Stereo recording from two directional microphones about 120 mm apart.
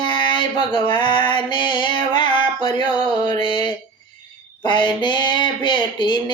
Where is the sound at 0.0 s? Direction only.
40° left (ahead or behind).